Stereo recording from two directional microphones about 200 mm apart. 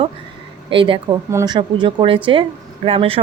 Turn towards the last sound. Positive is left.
turn(degrees=-30)  # may be behind; listen again after turning